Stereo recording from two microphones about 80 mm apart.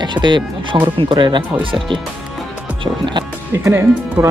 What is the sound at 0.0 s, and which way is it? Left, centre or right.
Speech, right.